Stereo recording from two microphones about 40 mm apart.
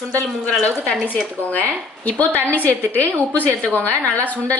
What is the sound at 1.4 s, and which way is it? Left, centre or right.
A woman's voice, left.